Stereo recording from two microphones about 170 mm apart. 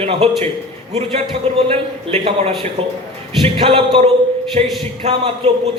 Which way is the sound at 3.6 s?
35° right (ahead or behind).